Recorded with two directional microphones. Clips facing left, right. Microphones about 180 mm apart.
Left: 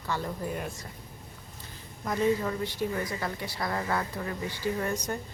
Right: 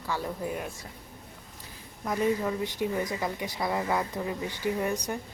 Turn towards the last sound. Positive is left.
turn(degrees=-15)  # may be behind; listen again after turning